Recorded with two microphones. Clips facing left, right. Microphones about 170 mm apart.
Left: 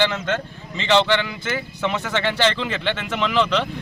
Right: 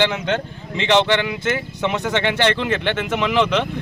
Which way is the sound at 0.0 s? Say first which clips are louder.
Right 2 dB; 15° right (ahead or behind).